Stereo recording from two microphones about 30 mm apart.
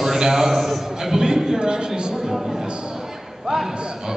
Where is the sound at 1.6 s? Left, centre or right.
Right.